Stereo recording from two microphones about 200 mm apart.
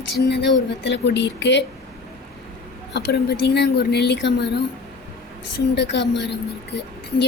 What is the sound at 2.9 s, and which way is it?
A woman's voice, 55° left (ahead or behind).